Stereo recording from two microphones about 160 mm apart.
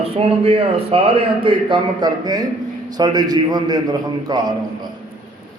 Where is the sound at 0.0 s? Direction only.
35° right (ahead or behind).